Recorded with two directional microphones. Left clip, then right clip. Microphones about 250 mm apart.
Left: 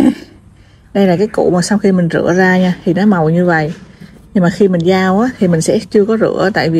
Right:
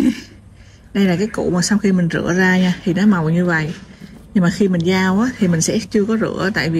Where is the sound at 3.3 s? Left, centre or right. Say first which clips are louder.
Left 6 dB; left.